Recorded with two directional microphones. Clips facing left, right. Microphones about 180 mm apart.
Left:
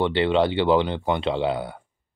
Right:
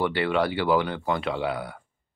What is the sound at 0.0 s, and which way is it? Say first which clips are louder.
Speech: left 4 dB; 25° left (ahead or behind).